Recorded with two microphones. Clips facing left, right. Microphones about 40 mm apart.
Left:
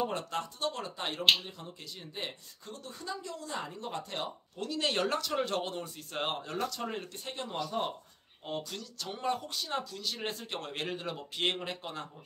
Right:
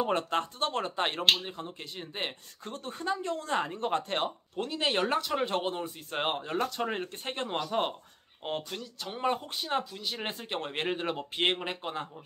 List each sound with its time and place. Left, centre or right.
0.0 s speech: right
4.6 s speech: right
8.6 s speech: right